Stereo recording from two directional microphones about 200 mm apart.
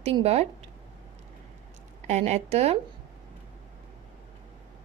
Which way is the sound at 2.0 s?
35° right (ahead or behind).